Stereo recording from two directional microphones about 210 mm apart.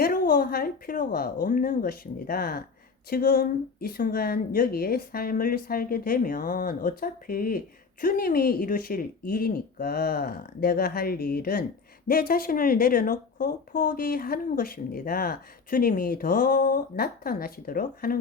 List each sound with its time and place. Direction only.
0.0 s a woman's voice: 45° left (ahead or behind)